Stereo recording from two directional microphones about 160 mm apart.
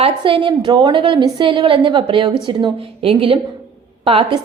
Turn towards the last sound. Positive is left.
turn(degrees=-35)  # may be behind; listen again after turning